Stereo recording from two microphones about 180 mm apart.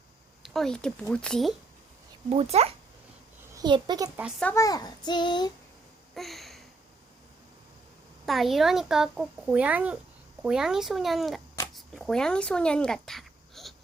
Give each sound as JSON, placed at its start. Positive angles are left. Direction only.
{"t": 0.4, "sound": "speech", "side_deg": 0}
{"t": 2.3, "sound": "speech", "side_deg": -35}
{"t": 3.6, "sound": "a child's voice", "side_deg": -25}
{"t": 4.4, "sound": "a child's voice", "side_deg": 20}
{"t": 6.1, "sound": "a sound", "side_deg": 0}
{"t": 8.3, "sound": "speech", "side_deg": 0}